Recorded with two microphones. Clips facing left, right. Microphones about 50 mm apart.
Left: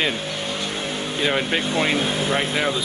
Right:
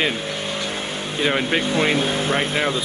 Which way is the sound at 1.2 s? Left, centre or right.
Centre.